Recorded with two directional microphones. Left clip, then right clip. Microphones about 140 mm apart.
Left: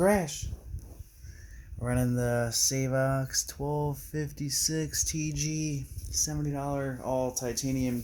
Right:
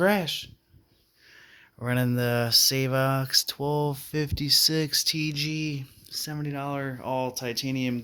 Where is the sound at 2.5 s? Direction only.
20° right (ahead or behind).